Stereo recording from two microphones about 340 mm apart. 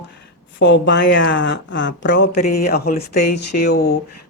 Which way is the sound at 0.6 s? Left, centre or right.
Left.